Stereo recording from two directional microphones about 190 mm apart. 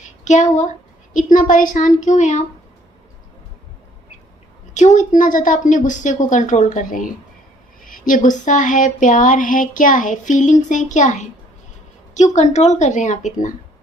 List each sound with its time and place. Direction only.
0.0 s a sound: 40° left (ahead or behind)
1.1 s speech: 40° left (ahead or behind)
4.7 s a woman's voice: 40° left (ahead or behind)